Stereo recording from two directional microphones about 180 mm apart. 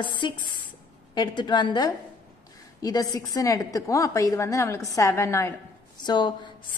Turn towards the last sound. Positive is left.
turn(degrees=25)  # may be behind; listen again after turning